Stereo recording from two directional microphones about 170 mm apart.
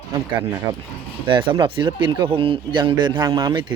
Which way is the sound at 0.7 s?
35° right (ahead or behind).